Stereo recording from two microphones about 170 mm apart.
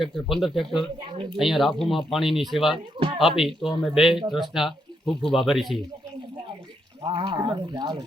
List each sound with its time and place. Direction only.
0.0 s speech: centre (ahead or behind)
7.0 s speech: 30° right (ahead or behind)